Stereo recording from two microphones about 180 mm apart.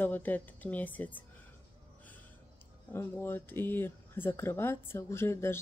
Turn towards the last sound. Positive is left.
turn(degrees=15)  # may be behind; listen again after turning